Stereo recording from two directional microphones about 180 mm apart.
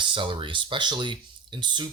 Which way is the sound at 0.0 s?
25° right (ahead or behind).